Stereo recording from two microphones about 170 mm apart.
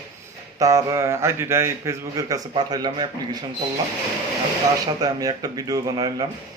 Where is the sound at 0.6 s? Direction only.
20° right (ahead or behind).